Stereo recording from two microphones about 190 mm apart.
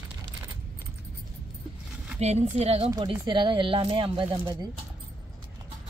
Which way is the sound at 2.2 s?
35° right (ahead or behind).